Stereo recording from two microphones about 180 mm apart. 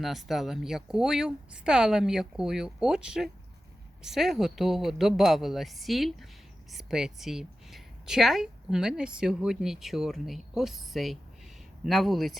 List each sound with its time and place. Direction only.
0.0 s a woman's voice: centre (ahead or behind)